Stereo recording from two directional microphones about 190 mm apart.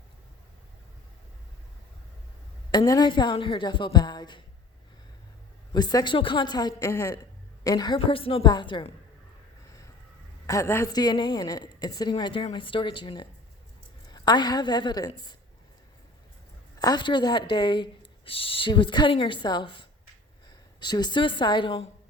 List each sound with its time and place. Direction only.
2.7 s speech: 20° left (ahead or behind)
5.7 s speech: 20° left (ahead or behind)
10.4 s speech: 15° left (ahead or behind)
16.8 s speech: 20° left (ahead or behind)